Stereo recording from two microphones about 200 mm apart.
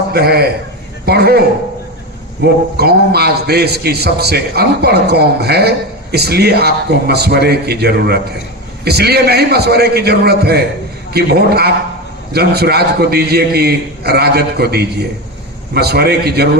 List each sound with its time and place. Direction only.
0.1 s a man's voice: 50° right (ahead or behind)
2.4 s a man's voice: 55° right (ahead or behind)